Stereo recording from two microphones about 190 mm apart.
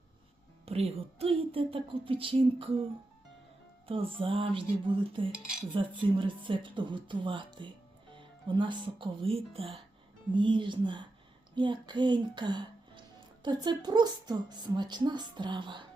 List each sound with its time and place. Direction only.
0.6 s speech: 30° right (ahead or behind)
3.8 s a woman's voice: 30° right (ahead or behind)